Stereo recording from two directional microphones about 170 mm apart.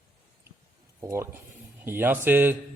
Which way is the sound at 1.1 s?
15° right (ahead or behind).